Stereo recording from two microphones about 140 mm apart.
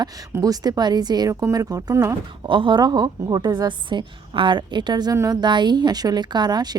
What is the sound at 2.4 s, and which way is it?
A woman's voice, 35° right (ahead or behind).